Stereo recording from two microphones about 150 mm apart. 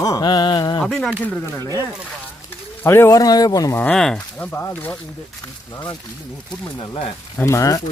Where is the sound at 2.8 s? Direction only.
15° left (ahead or behind).